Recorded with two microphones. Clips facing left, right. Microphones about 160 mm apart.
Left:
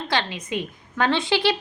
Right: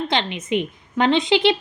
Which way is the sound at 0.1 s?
20° right (ahead or behind).